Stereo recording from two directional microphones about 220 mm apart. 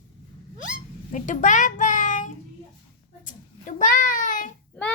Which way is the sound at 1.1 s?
35° left (ahead or behind).